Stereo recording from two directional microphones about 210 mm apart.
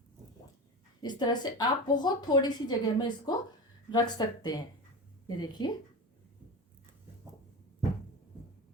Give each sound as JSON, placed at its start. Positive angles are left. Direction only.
{"t": 1.0, "sound": "a woman's voice", "side_deg": 20}